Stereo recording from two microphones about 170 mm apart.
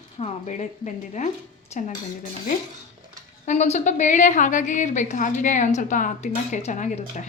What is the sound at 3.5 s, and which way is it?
A woman's voice, 40° left (ahead or behind).